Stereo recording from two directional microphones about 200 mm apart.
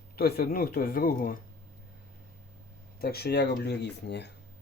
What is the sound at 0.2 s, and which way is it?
Speech, 50° left (ahead or behind).